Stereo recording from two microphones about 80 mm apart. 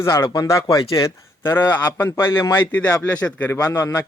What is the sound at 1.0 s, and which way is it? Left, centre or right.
Speech, left.